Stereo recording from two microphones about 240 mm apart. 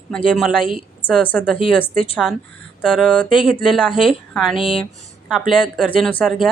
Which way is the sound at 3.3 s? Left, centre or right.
Left.